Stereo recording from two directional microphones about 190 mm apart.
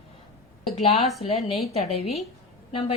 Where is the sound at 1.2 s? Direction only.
30° left (ahead or behind).